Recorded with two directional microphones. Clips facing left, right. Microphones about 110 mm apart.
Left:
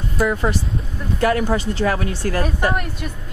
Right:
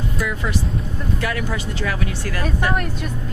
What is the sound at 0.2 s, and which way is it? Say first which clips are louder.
Speech: left 7 dB; 35° left (ahead or behind).